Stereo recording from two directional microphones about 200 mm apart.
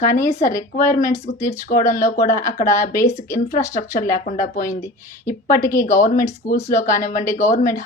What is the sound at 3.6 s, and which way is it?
Speech, 15° left (ahead or behind).